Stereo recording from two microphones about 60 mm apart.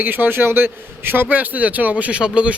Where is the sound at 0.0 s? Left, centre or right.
Right.